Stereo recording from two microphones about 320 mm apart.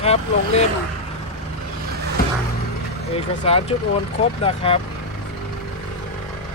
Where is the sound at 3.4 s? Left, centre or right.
Centre.